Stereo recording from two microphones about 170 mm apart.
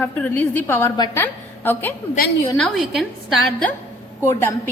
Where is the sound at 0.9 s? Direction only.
25° left (ahead or behind).